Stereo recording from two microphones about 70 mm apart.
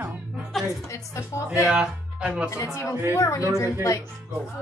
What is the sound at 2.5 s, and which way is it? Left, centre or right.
Speech, left.